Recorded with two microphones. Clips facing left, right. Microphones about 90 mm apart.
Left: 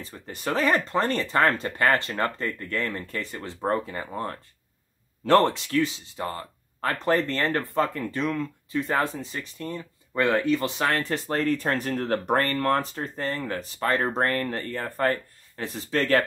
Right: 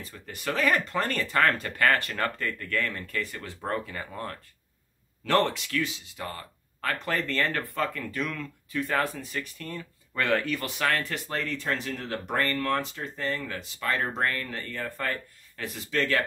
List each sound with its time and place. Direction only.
0.0 s speech: 30° left (ahead or behind)